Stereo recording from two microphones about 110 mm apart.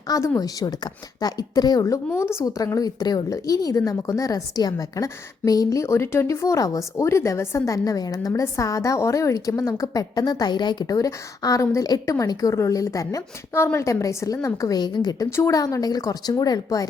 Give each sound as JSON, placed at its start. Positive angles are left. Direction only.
{"t": 0.1, "sound": "a woman's voice", "side_deg": 35}
{"t": 15.3, "sound": "a woman's voice", "side_deg": 25}